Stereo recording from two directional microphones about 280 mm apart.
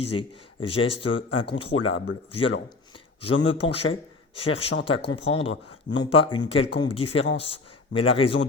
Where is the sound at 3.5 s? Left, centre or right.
Left.